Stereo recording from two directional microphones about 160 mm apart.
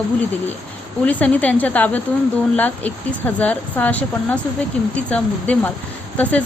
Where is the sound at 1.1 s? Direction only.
10° left (ahead or behind).